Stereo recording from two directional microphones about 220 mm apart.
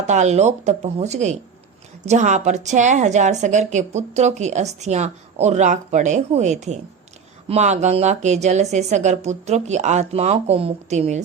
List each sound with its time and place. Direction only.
0.1 s a woman's voice: 30° right (ahead or behind)